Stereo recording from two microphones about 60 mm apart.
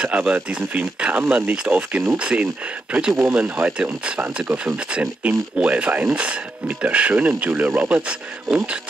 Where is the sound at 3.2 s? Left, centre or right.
Right.